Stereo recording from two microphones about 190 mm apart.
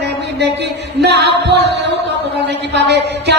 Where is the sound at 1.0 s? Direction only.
60° right (ahead or behind).